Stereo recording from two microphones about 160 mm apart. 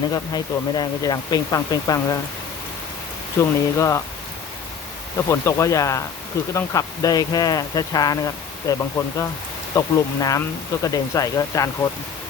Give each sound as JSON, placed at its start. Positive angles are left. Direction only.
{"t": 0.1, "sound": "speech", "side_deg": 25}
{"t": 3.3, "sound": "speech", "side_deg": 20}
{"t": 5.1, "sound": "speech", "side_deg": 20}